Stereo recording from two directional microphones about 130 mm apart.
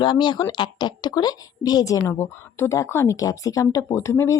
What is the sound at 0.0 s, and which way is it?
Speech, 35° left (ahead or behind).